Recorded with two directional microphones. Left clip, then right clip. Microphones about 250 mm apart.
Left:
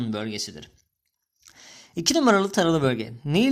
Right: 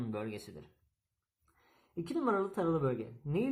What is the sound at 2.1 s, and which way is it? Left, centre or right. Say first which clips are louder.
Speech: left 13 dB; left.